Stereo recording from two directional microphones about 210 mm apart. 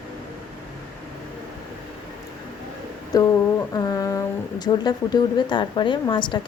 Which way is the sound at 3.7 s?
15° left (ahead or behind).